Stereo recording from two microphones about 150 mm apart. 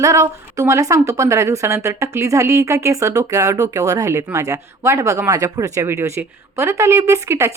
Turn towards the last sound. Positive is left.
turn(degrees=-20)  # may be behind; listen again after turning